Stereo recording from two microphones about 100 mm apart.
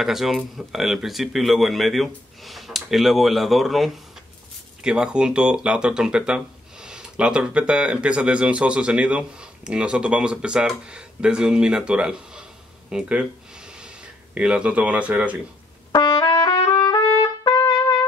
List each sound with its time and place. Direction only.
0.0 s speech: centre (ahead or behind)
16.0 s trumpet: 50° left (ahead or behind)